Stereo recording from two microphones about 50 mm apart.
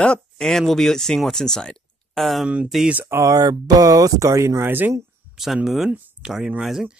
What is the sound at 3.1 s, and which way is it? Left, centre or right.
Speech, right.